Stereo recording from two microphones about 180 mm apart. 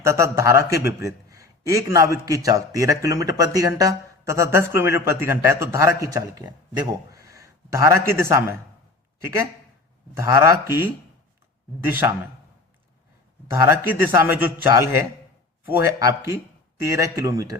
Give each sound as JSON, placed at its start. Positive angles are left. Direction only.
{"t": 0.0, "sound": "a man's voice", "side_deg": -15}
{"t": 10.2, "sound": "a man's voice", "side_deg": -15}
{"t": 13.5, "sound": "a man's voice", "side_deg": -15}